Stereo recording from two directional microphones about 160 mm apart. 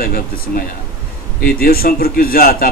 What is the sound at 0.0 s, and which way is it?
A man's voice, 65° left (ahead or behind).